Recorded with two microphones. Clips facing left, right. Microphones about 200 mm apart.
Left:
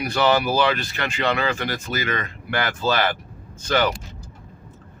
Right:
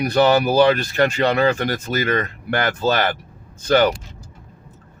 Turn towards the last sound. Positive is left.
turn(degrees=-40)  # may be behind; listen again after turning